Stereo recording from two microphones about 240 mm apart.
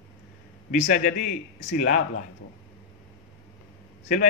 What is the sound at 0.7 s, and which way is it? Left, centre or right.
A man's voice, left.